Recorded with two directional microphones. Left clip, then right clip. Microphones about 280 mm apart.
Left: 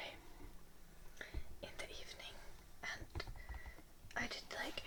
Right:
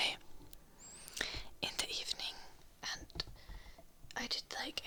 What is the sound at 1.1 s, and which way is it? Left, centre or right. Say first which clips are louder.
Whispering: right 12 dB; right.